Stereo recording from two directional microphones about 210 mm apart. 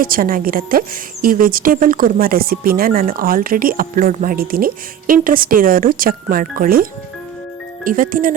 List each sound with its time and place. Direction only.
0.0 s a woman's voice: 45° right (ahead or behind)
7.9 s speech: 40° right (ahead or behind)